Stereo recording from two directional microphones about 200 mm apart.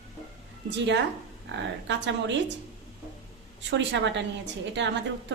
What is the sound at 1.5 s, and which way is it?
A woman's voice, 65° right (ahead or behind).